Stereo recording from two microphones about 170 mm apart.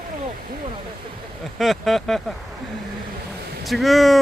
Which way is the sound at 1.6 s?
Centre (ahead or behind).